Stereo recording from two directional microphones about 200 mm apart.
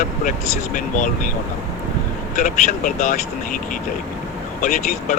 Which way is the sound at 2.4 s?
40° left (ahead or behind).